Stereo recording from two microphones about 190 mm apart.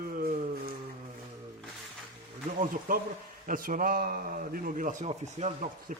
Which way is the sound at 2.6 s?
45° right (ahead or behind).